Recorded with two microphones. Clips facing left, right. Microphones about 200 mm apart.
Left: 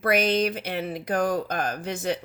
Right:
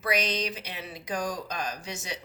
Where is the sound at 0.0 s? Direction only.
55° left (ahead or behind).